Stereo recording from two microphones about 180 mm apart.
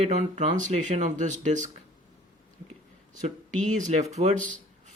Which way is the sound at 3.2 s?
40° right (ahead or behind).